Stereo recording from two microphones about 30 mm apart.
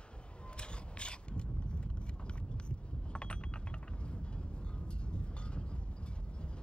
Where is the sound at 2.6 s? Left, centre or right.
Left.